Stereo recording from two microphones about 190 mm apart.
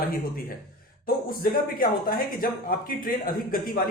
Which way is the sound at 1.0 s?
50° left (ahead or behind).